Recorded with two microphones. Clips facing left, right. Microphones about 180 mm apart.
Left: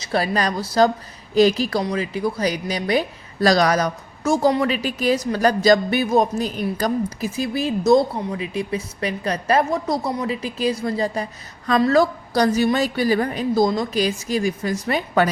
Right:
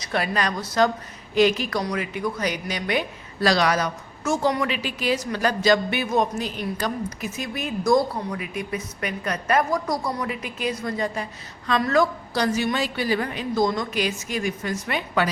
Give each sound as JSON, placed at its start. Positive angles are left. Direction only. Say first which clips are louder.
{"t": 0.0, "sound": "a woman's voice", "louder": "left 4 dB", "side_deg": 35}